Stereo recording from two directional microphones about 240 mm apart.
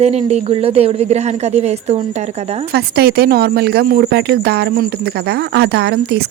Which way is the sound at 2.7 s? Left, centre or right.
Right.